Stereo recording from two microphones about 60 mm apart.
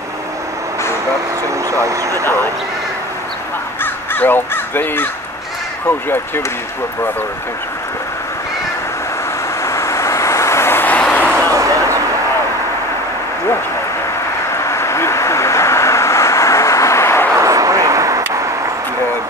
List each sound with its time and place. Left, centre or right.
1.8 s speech: right
3.8 s speech: left
9.6 s vehicle: left
10.9 s a sound: left
11.5 s a sound: right
14.6 s vehicle: left
17.4 s vehicle: right